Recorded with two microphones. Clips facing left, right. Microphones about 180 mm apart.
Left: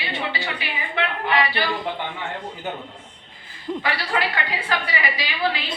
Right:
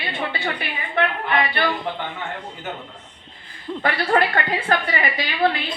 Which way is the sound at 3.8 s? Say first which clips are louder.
Right 6 dB; 50° right (ahead or behind).